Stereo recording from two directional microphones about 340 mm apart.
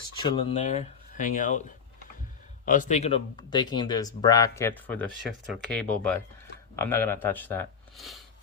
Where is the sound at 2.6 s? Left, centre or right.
Left.